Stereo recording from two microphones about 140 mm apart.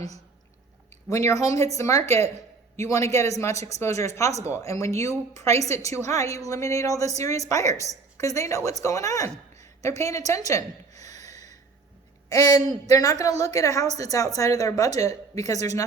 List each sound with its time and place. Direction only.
1.1 s a woman's voice: 25° left (ahead or behind)
9.6 s a sound: 25° left (ahead or behind)
12.3 s a woman's voice: 25° left (ahead or behind)